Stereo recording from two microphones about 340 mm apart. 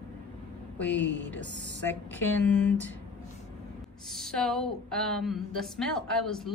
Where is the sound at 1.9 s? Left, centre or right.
Centre.